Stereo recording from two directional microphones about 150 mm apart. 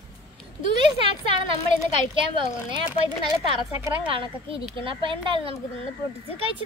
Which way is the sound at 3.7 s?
15° right (ahead or behind).